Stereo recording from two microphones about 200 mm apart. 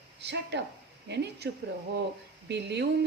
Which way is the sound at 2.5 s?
60° right (ahead or behind).